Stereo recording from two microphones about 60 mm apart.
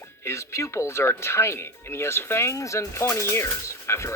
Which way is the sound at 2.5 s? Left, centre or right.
Left.